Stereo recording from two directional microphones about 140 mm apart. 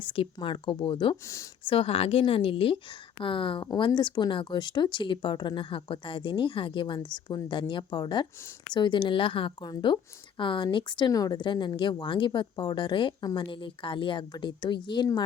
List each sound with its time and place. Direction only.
0.0 s a woman's voice: 40° left (ahead or behind)
1.1 s speech: 20° left (ahead or behind)
1.6 s a woman's voice: 40° left (ahead or behind)